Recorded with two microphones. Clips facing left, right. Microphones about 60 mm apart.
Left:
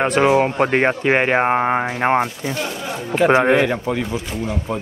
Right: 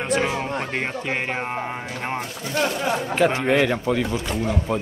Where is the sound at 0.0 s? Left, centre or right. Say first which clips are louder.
Left 8 dB; left.